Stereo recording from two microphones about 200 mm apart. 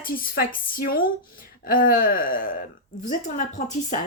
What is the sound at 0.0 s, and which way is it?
A woman's voice, 45° left (ahead or behind).